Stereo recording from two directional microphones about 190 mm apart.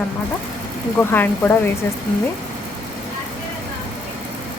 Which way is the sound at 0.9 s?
10° left (ahead or behind).